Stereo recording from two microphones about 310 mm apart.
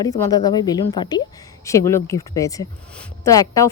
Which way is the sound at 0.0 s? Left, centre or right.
Centre.